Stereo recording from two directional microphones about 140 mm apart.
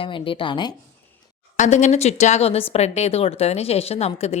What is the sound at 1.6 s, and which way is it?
A woman's voice, 55° left (ahead or behind).